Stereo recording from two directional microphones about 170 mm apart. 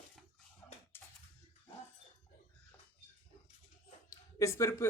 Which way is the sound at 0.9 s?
15° left (ahead or behind).